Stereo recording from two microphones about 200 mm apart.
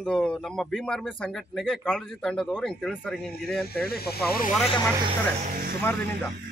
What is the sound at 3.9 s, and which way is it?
Speech, 50° left (ahead or behind).